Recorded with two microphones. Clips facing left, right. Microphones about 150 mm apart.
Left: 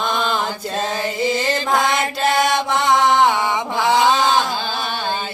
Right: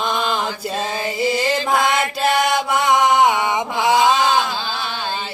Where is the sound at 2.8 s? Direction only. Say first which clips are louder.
Even; 10° right (ahead or behind).